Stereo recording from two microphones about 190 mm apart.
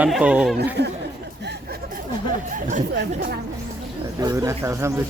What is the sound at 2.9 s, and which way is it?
Speech, 65° right (ahead or behind).